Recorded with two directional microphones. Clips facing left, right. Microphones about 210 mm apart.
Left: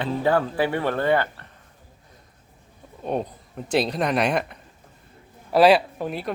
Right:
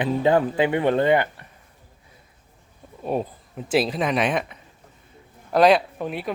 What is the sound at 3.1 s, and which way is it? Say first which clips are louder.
Speech: right 1 dB; 5° right (ahead or behind).